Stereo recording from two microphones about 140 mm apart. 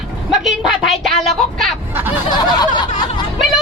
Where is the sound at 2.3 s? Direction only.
30° left (ahead or behind).